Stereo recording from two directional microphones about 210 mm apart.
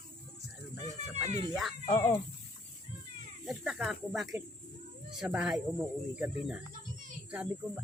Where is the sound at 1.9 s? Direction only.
10° left (ahead or behind).